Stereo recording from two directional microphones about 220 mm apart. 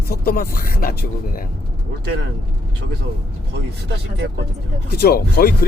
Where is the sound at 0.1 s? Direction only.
45° left (ahead or behind).